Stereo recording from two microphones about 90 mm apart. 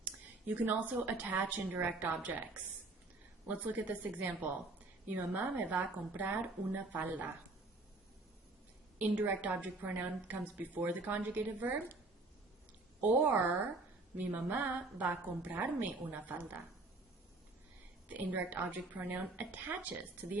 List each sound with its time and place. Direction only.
0.0 s speech: 15° right (ahead or behind)
3.4 s a woman's voice: 20° right (ahead or behind)
9.0 s a woman's voice: 15° right (ahead or behind)
13.0 s a woman's voice: 20° right (ahead or behind)
18.1 s a woman's voice: 15° right (ahead or behind)